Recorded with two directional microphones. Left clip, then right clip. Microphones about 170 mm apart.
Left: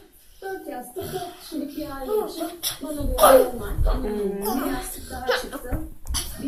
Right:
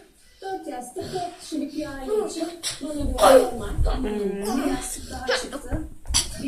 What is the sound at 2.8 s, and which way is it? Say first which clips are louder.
Speech: right 3 dB; 45° right (ahead or behind).